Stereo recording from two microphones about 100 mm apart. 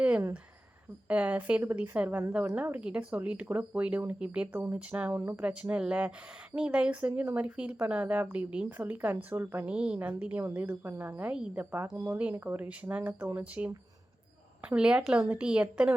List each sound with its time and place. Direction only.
1.0 s a woman's voice: 15° right (ahead or behind)
11.6 s a woman's voice: 20° right (ahead or behind)